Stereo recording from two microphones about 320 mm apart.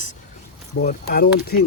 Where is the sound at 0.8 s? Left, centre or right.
Left.